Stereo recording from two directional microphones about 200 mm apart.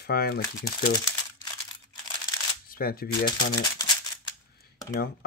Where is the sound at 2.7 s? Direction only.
45° left (ahead or behind).